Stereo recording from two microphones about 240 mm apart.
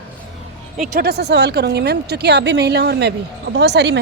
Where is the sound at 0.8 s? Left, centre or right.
Right.